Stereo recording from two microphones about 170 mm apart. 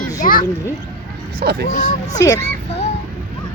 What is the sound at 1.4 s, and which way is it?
Speech, 65° right (ahead or behind).